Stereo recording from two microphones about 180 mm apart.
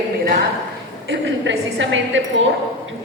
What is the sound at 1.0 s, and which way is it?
A woman's voice, 90° right.